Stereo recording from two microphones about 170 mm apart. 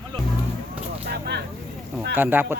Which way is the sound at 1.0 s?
75° right (ahead or behind).